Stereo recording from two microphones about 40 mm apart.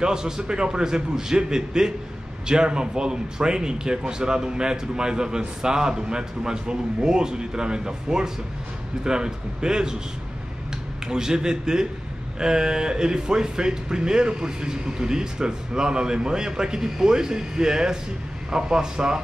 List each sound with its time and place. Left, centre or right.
0.0 s speech: centre
11.1 s speech: centre